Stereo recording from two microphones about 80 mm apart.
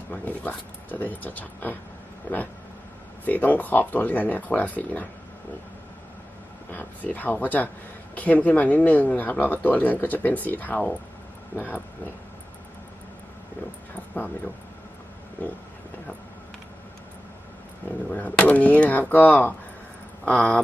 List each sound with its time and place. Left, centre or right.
0.1 s a woman's voice: left
3.2 s a woman's voice: left
6.7 s a woman's voice: left
14.1 s speech: centre
17.8 s a woman's voice: left
20.3 s speech: centre